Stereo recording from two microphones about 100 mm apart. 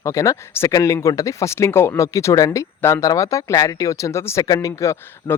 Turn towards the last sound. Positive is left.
turn(degrees=30)  # may be behind; listen again after turning